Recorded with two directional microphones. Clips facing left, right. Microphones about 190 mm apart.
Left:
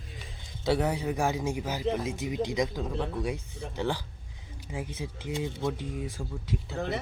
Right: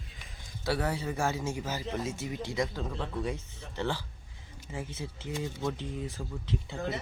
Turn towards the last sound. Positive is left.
turn(degrees=10)  # may be behind; listen again after turning